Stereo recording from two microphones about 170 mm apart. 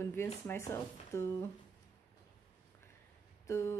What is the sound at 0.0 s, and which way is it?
Speech, 15° left (ahead or behind).